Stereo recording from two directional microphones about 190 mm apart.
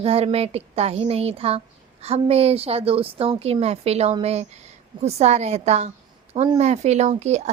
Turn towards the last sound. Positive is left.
turn(degrees=-35)  # may be behind; listen again after turning